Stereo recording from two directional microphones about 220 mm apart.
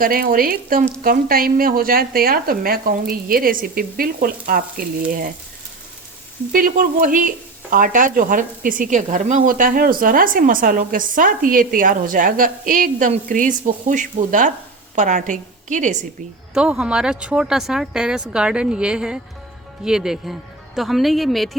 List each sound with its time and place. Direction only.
0.0 s speech: 40° right (ahead or behind)
6.5 s a woman's voice: 40° right (ahead or behind)
16.6 s speech: 5° right (ahead or behind)